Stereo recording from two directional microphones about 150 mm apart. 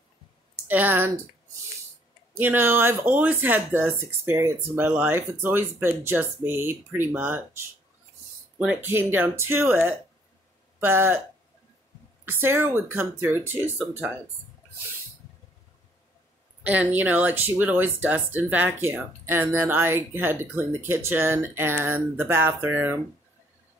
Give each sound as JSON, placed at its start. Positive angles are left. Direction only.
{"t": 0.7, "sound": "speech", "side_deg": -10}
{"t": 2.3, "sound": "speech", "side_deg": -15}
{"t": 12.3, "sound": "speech", "side_deg": -15}
{"t": 16.6, "sound": "speech", "side_deg": -10}